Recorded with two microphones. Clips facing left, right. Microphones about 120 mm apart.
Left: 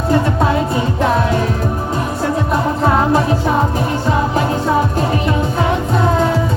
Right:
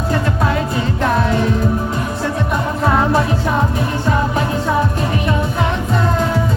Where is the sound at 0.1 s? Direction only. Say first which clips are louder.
Left 4 dB; 20° left (ahead or behind).